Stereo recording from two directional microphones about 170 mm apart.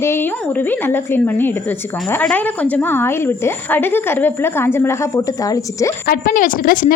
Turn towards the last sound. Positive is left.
turn(degrees=55)  # may be behind; listen again after turning